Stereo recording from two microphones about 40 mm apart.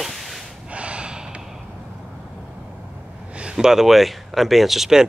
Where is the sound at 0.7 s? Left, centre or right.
Right.